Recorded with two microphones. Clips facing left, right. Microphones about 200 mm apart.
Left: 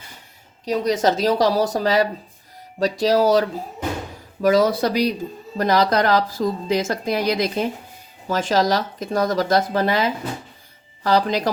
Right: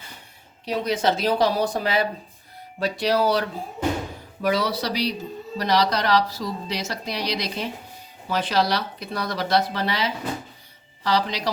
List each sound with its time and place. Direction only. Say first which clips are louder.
0.6 s speech: left 4 dB; 40° left (ahead or behind)
4.4 s speech: left 7 dB; 45° left (ahead or behind)